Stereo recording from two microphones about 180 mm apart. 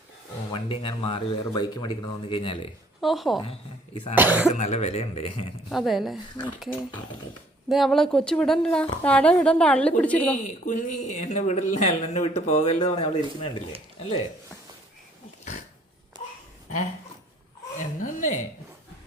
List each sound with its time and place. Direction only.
0.5 s speech: 30° left (ahead or behind)
3.0 s a woman's voice: centre (ahead or behind)
4.1 s cough: 10° right (ahead or behind)
4.5 s speech: 40° left (ahead or behind)
5.6 s a woman's voice: centre (ahead or behind)
6.4 s speech: 20° left (ahead or behind)
7.7 s a woman's voice: centre (ahead or behind)
10.7 s speech: 45° left (ahead or behind)
17.7 s chuckle: 45° left (ahead or behind)